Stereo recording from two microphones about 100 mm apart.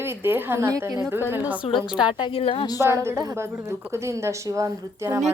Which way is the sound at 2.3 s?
70° left (ahead or behind).